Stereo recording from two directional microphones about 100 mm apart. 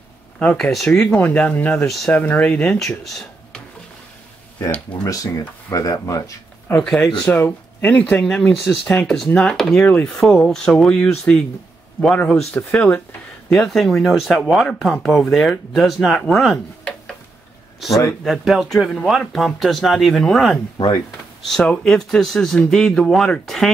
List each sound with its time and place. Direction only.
0.4 s speech: 10° left (ahead or behind)
0.9 s speech: 15° left (ahead or behind)
1.9 s speech: 5° left (ahead or behind)
4.6 s speech: 15° left (ahead or behind)
5.0 s speech: 35° left (ahead or behind)
6.7 s speech: 5° left (ahead or behind)
7.2 s speech: 20° left (ahead or behind)
12.7 s speech: 10° left (ahead or behind)
17.7 s speech: centre (ahead or behind)